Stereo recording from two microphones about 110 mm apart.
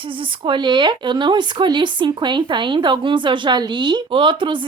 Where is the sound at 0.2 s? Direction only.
45° right (ahead or behind).